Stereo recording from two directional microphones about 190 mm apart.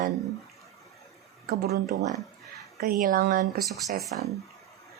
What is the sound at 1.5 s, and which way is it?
Speech, 55° right (ahead or behind).